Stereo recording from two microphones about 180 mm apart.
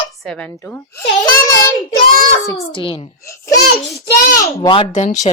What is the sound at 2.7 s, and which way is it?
Child singing, 30° left (ahead or behind).